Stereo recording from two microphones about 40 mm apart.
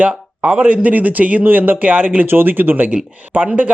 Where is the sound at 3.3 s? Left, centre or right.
Right.